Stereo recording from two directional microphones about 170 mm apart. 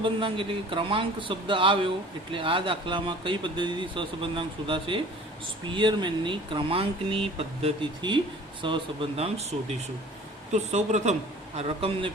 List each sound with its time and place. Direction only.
0.0 s speech: 30° right (ahead or behind)